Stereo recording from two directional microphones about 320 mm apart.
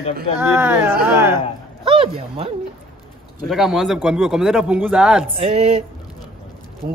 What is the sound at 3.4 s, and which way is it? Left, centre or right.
Speech, centre.